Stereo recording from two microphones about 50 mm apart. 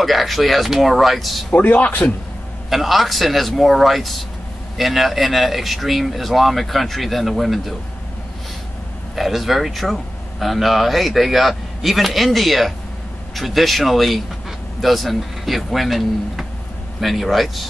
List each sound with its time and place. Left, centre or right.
0.0 s speech: centre
1.5 s a man's voice: left
2.7 s speech: centre
9.1 s speech: centre